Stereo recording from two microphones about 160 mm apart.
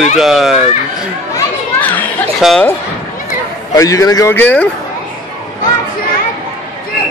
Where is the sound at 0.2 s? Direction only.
Centre (ahead or behind).